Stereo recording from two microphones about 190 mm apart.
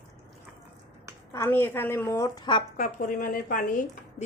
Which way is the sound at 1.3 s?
10° left (ahead or behind).